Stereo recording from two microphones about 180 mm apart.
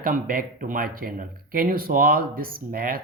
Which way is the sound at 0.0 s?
50° right (ahead or behind).